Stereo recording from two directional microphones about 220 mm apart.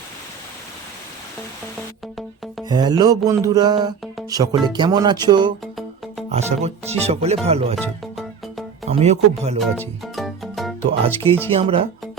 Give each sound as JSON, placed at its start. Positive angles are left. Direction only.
{"t": 2.6, "sound": "music", "side_deg": -20}
{"t": 7.8, "sound": "music", "side_deg": 0}
{"t": 8.9, "sound": "music", "side_deg": -30}
{"t": 9.6, "sound": "music", "side_deg": 0}
{"t": 11.0, "sound": "music", "side_deg": -25}